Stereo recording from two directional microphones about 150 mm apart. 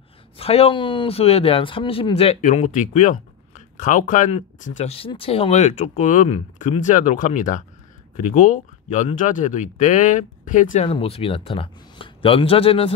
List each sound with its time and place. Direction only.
0.4 s a man's voice: 40° left (ahead or behind)
2.4 s speech: 60° left (ahead or behind)
10.9 s a man's voice: 40° left (ahead or behind)